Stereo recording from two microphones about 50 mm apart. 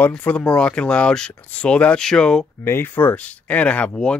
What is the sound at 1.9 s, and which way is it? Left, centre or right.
Speech, centre.